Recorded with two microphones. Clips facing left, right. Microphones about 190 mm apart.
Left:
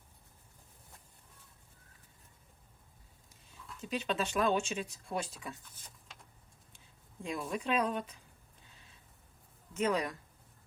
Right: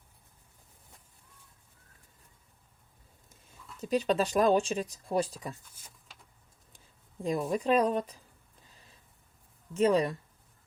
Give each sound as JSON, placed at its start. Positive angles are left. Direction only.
{"t": 3.8, "sound": "speech", "side_deg": -40}
{"t": 5.7, "sound": "a sound", "side_deg": 0}
{"t": 6.7, "sound": "speech", "side_deg": -40}
{"t": 9.7, "sound": "speech", "side_deg": -30}